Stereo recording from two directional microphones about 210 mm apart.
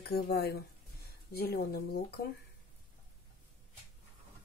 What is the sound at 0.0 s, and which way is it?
Speech, 50° left (ahead or behind).